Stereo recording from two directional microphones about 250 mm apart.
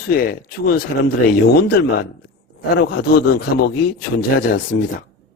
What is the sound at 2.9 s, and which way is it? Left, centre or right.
Speech, left.